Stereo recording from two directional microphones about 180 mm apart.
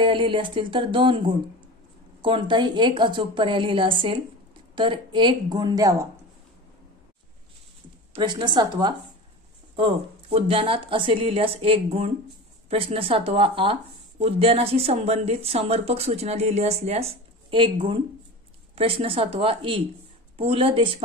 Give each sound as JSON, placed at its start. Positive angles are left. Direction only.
{"t": 0.0, "sound": "a woman's voice", "side_deg": -25}
{"t": 8.1, "sound": "a woman's voice", "side_deg": -25}